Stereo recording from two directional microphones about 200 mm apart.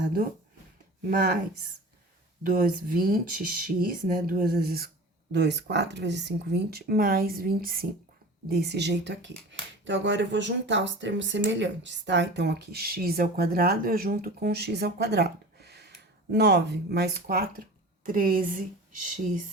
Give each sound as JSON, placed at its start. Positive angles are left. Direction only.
{"t": 1.1, "sound": "speech", "side_deg": -45}
{"t": 2.4, "sound": "speech", "side_deg": -45}